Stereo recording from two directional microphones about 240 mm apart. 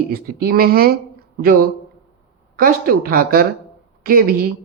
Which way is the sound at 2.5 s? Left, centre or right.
Right.